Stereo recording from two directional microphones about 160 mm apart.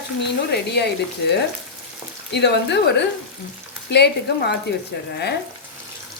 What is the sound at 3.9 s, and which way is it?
Speech, 90° left.